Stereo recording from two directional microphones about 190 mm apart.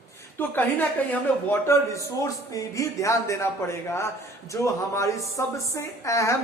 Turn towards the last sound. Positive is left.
turn(degrees=15)  # may be behind; listen again after turning